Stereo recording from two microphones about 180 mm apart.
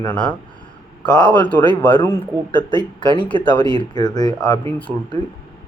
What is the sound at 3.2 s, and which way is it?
Speech, 25° left (ahead or behind).